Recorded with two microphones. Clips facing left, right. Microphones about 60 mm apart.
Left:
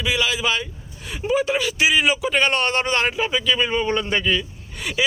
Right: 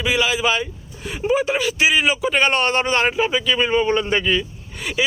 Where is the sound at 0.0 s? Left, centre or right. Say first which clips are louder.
Right 3 dB; centre.